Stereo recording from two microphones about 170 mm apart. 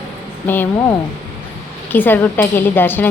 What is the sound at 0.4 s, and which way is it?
A woman's voice, 10° left (ahead or behind).